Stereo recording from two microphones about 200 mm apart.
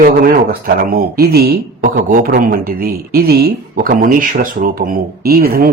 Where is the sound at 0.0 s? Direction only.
45° right (ahead or behind).